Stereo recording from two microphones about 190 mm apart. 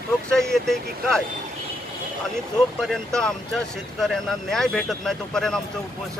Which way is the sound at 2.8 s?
Centre (ahead or behind).